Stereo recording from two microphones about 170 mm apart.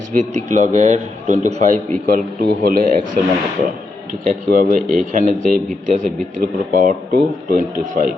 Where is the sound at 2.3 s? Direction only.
65° right (ahead or behind).